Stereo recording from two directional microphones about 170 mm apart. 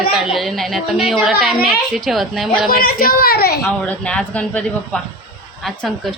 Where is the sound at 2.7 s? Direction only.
60° left (ahead or behind).